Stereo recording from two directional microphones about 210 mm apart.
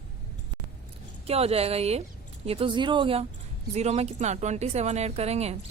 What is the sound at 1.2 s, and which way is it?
A woman's voice, 30° right (ahead or behind).